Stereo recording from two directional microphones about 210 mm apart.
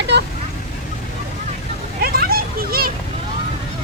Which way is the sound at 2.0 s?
45° right (ahead or behind).